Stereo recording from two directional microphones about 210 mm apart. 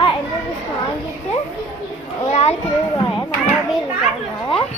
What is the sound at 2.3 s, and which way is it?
Children playing, 30° left (ahead or behind).